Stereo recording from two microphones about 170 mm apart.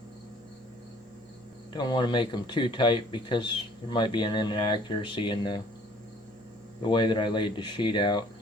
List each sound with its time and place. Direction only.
1.7 s speech: 25° left (ahead or behind)
6.9 s speech: 25° left (ahead or behind)